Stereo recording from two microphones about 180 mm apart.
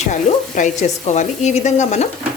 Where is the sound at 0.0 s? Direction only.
40° left (ahead or behind).